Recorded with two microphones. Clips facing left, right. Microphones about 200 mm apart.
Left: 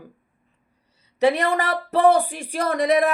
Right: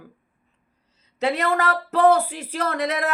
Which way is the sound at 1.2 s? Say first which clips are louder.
Left 2 dB; 15° left (ahead or behind).